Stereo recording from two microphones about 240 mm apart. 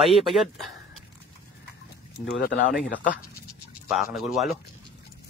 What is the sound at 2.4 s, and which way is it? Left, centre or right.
Speech, left.